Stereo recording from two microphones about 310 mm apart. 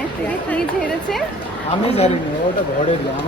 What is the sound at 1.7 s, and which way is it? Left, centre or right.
Speech, centre.